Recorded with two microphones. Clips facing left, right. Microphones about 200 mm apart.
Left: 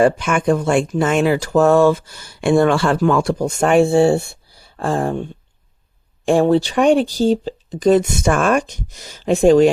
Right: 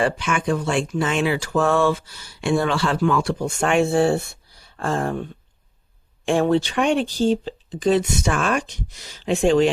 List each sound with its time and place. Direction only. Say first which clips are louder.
0.0 s speech: left 7 dB; 45° left (ahead or behind)